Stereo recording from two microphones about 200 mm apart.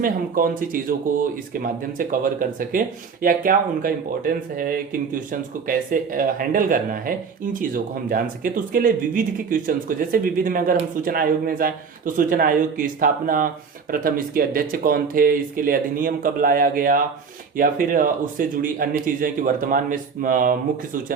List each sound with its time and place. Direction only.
0.0 s speech: 45° right (ahead or behind)